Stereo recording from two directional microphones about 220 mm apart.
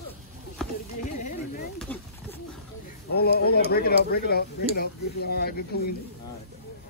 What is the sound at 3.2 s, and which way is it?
Speech, 45° left (ahead or behind).